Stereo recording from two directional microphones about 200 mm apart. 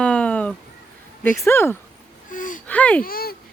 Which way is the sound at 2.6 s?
5° left (ahead or behind).